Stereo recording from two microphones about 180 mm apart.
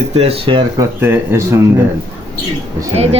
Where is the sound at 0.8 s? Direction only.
10° right (ahead or behind).